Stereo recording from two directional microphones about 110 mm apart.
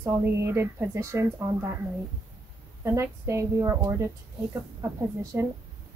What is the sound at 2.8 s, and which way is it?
Speech, 25° right (ahead or behind).